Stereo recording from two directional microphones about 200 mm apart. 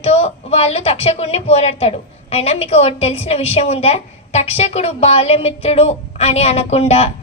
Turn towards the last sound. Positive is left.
turn(degrees=30)  # may be behind; listen again after turning